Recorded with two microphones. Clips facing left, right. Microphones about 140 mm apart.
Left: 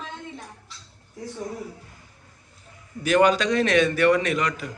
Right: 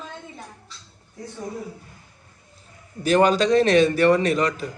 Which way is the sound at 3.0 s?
30° right (ahead or behind).